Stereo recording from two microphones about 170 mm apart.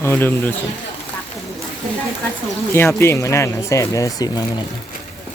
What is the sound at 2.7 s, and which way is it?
Speech, 15° left (ahead or behind).